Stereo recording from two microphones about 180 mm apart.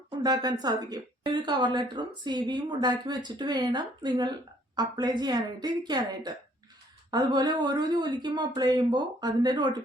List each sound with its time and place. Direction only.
0.2 s a woman's voice: 20° right (ahead or behind)